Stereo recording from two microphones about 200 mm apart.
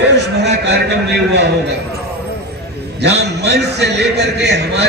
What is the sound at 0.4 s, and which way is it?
A man's voice, 55° right (ahead or behind).